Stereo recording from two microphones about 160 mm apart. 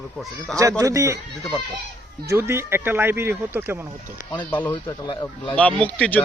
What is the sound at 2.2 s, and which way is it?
Speech, 15° right (ahead or behind).